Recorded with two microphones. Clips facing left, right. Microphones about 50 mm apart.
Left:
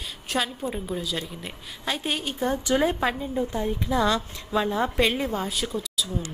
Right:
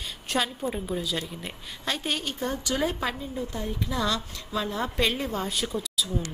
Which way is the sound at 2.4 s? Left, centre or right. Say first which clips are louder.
Left 5 dB; left.